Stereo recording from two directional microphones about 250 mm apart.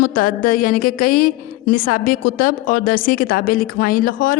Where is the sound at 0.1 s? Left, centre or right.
Left.